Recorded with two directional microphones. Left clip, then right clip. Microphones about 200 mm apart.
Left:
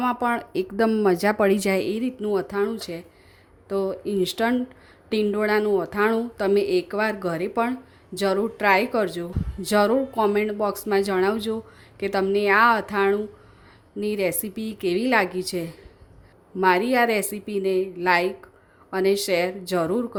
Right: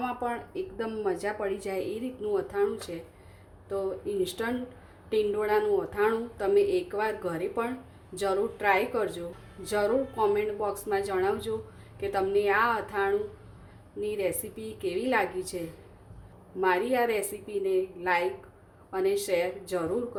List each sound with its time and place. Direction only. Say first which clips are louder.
0.0 s a woman's voice: left 8 dB; 45° left (ahead or behind)